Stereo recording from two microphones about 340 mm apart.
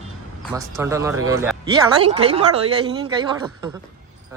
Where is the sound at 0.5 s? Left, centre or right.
Centre.